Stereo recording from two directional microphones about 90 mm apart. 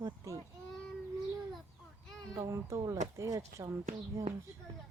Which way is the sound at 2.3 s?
40° right (ahead or behind).